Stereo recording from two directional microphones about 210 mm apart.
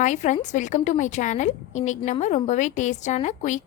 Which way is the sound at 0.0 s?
35° left (ahead or behind).